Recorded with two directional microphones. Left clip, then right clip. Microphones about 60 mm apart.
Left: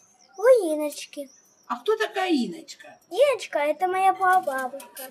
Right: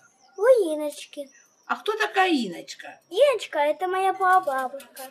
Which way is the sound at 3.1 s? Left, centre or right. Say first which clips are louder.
Right 1 dB; centre.